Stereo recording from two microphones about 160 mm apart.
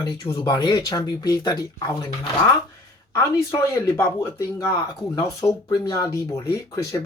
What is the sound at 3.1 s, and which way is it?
Speech, 15° left (ahead or behind).